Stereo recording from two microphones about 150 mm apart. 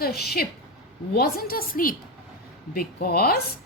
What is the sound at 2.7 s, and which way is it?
Speech, 85° left.